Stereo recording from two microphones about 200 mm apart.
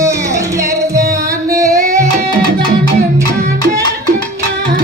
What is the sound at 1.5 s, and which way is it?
Singing, 15° right (ahead or behind).